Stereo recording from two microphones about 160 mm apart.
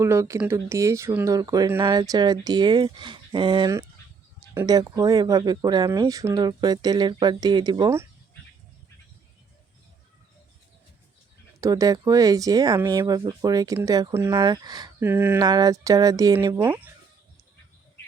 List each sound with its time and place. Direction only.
0.0 s speech: 15° right (ahead or behind)
11.6 s speech: 20° right (ahead or behind)
14.3 s speech: 25° right (ahead or behind)
15.0 s speech: 15° right (ahead or behind)
15.4 s speech: 25° right (ahead or behind)